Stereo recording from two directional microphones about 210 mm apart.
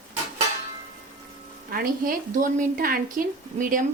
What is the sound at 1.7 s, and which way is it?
A woman's voice, 45° right (ahead or behind).